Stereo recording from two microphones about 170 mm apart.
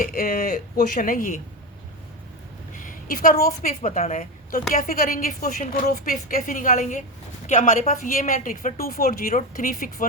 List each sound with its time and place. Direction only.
0.0 s a woman's voice: 55° left (ahead or behind)
2.8 s a woman's voice: 50° left (ahead or behind)